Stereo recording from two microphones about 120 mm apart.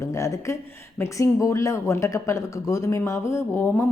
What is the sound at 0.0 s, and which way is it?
Speech, 25° left (ahead or behind).